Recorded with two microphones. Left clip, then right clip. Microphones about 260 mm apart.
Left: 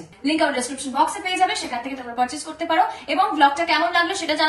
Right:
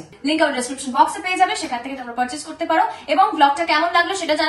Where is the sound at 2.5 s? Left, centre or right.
Centre.